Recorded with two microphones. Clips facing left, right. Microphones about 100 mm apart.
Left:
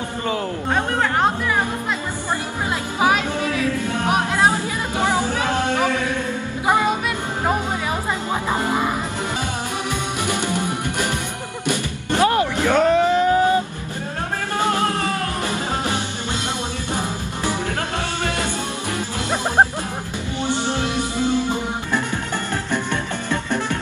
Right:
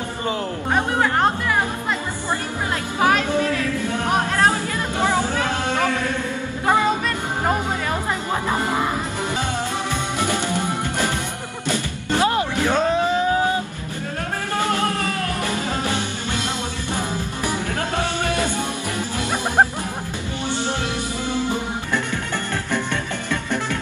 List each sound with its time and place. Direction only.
3.0 s music: 15° left (ahead or behind)
9.8 s music: 15° left (ahead or behind)
11.6 s music: 15° left (ahead or behind)
12.2 s music: 25° right (ahead or behind)
12.6 s a sound: 20° right (ahead or behind)
14.6 s music: 20° left (ahead or behind)
20.4 s music: 20° left (ahead or behind)